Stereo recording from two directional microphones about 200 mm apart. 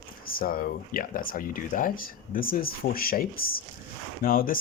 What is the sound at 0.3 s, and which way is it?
Speech, 45° left (ahead or behind).